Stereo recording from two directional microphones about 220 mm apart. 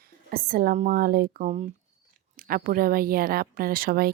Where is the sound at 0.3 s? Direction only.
40° right (ahead or behind).